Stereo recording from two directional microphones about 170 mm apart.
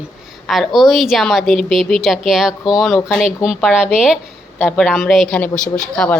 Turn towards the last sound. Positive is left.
turn(degrees=5)  # may be behind; listen again after turning